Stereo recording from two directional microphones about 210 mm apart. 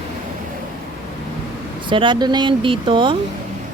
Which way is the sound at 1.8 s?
25° right (ahead or behind).